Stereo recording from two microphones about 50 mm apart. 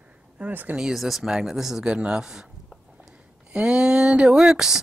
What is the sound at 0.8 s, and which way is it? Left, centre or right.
Speech, centre.